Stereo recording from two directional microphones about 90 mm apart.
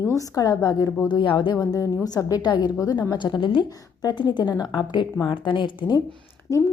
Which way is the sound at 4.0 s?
55° left (ahead or behind).